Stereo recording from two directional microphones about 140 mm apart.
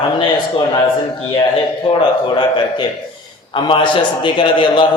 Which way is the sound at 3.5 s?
35° left (ahead or behind).